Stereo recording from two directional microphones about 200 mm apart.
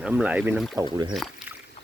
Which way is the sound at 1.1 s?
Centre (ahead or behind).